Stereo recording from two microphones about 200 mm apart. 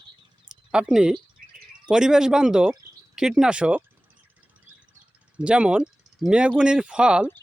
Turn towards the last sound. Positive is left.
turn(degrees=-5)  # may be behind; listen again after turning